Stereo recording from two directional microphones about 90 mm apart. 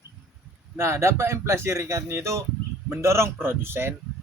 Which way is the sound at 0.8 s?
30° right (ahead or behind).